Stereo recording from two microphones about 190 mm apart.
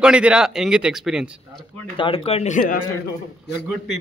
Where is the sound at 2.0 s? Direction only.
30° left (ahead or behind).